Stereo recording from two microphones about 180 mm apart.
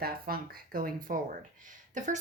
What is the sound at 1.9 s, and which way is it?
Speech, 45° right (ahead or behind).